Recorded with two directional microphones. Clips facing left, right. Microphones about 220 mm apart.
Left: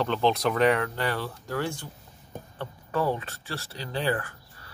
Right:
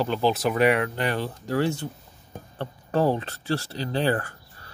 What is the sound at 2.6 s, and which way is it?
Speech, 35° right (ahead or behind).